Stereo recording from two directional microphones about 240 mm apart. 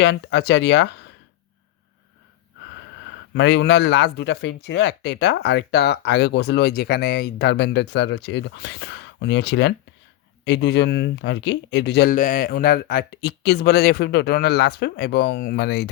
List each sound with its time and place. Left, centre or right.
0.0 s speech: left
3.3 s speech: left